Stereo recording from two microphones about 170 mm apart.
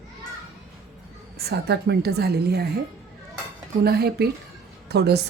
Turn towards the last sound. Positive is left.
turn(degrees=-75)  # may be behind; listen again after turning